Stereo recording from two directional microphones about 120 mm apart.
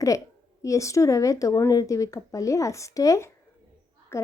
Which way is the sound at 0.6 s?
25° left (ahead or behind).